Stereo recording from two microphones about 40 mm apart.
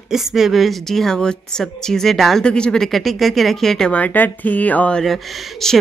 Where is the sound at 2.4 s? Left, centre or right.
Left.